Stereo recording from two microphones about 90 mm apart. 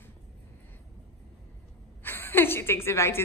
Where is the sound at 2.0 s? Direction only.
25° left (ahead or behind).